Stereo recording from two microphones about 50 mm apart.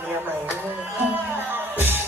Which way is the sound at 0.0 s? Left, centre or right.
Right.